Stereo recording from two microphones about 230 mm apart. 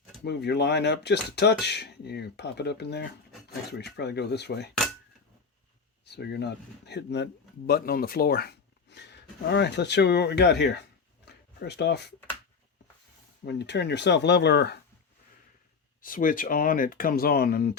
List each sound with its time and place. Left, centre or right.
0.3 s speech: left
6.1 s speech: left
13.4 s speech: left
16.0 s speech: left